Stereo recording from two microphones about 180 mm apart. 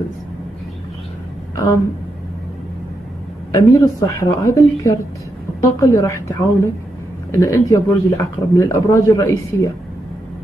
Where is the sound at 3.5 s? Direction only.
20° left (ahead or behind).